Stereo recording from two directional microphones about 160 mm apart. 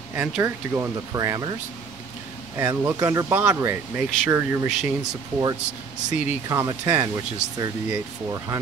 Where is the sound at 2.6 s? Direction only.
15° right (ahead or behind).